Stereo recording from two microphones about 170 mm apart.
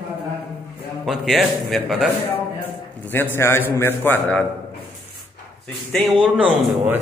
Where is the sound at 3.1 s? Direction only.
15° left (ahead or behind).